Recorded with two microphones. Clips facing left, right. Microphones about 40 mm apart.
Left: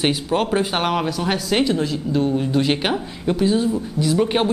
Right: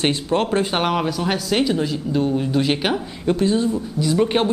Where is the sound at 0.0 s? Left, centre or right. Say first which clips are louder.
Even; centre.